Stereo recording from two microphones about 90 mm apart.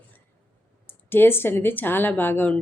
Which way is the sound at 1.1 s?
25° left (ahead or behind).